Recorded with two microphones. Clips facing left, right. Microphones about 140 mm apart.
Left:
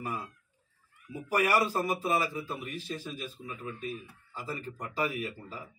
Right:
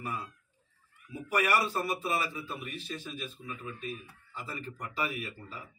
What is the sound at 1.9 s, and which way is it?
A man's voice, 40° left (ahead or behind).